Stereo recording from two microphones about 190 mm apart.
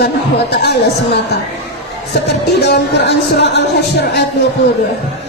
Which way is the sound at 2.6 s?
60° left (ahead or behind).